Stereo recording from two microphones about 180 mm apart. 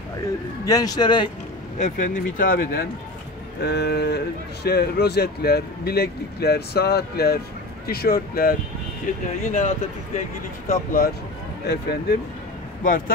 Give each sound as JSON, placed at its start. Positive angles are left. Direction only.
{"t": 0.7, "sound": "a man's voice", "side_deg": 20}
{"t": 1.8, "sound": "speech", "side_deg": 45}
{"t": 11.6, "sound": "speech", "side_deg": 65}